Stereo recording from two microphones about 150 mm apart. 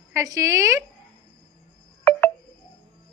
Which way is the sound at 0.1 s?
20° right (ahead or behind).